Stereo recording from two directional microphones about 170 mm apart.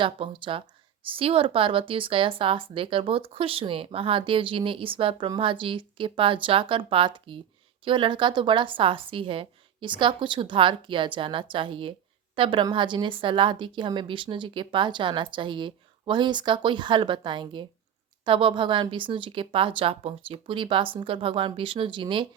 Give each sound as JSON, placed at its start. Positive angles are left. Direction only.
{"t": 0.0, "sound": "a woman's voice", "side_deg": -30}